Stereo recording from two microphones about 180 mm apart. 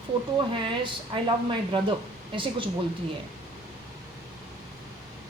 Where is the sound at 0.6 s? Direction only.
30° right (ahead or behind).